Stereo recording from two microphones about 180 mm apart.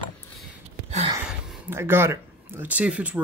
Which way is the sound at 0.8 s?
35° right (ahead or behind).